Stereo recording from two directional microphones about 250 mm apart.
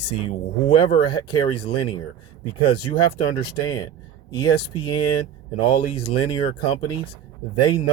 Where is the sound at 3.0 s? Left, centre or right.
Centre.